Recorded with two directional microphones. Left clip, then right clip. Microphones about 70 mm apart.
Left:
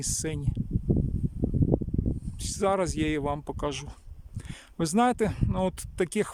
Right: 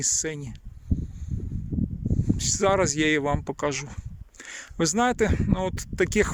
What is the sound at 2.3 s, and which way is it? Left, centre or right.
Speech, left.